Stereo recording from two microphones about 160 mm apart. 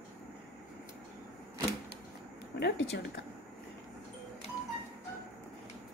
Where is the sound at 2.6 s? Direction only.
90° left.